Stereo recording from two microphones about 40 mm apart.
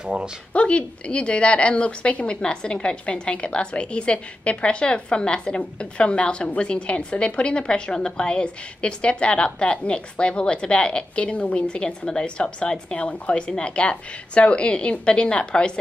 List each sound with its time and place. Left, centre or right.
0.5 s a woman's voice: left